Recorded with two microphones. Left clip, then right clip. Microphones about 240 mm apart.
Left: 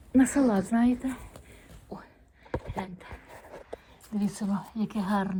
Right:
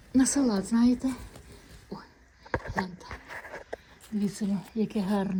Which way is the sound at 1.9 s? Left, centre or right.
Centre.